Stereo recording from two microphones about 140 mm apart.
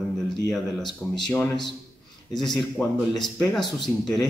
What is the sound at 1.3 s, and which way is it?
Speech, 15° left (ahead or behind).